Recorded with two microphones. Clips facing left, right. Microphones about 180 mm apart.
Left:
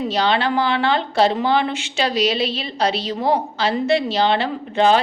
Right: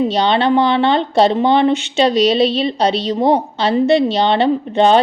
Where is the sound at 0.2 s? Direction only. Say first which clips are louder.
Right 3 dB; 25° right (ahead or behind).